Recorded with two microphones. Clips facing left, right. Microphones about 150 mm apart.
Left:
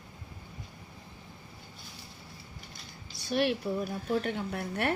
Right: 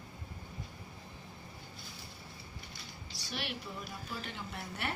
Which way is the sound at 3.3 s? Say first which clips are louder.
Left 13 dB; 55° left (ahead or behind).